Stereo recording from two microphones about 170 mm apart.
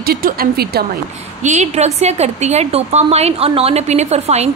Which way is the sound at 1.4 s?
45° right (ahead or behind).